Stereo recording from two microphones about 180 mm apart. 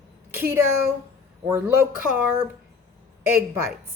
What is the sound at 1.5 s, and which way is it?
Speech, 15° right (ahead or behind).